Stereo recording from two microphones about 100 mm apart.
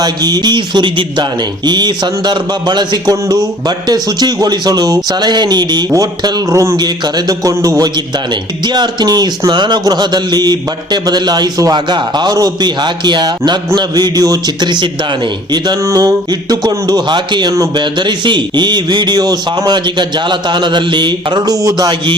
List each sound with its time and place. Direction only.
0.0 s speech: 40° right (ahead or behind)
7.9 s speech: 45° right (ahead or behind)
15.8 s speech: 35° right (ahead or behind); by 21.5 s 50° right (ahead or behind)
21.5 s speech: 35° right (ahead or behind)